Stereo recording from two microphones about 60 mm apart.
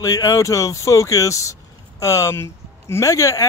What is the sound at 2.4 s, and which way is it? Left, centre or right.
Speech, left.